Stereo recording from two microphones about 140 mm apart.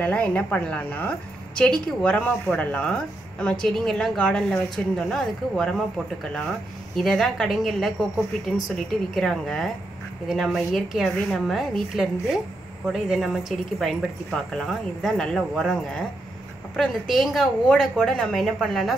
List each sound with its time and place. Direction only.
0.0 s a woman's voice: 10° left (ahead or behind)
7.0 s speech: 5° left (ahead or behind)